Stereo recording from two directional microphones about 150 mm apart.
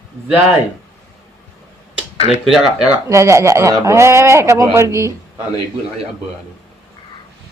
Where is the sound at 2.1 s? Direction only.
40° left (ahead or behind).